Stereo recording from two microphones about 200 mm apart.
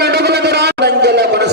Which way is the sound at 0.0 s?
55° right (ahead or behind).